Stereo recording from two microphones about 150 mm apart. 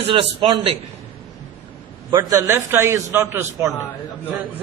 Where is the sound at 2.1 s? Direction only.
20° right (ahead or behind).